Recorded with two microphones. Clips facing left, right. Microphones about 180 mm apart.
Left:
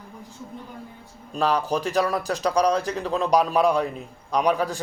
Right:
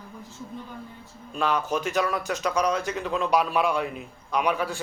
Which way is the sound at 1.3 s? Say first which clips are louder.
Left 3 dB; 35° left (ahead or behind).